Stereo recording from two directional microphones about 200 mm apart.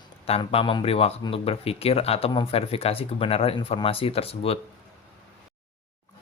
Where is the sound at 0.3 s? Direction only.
30° left (ahead or behind).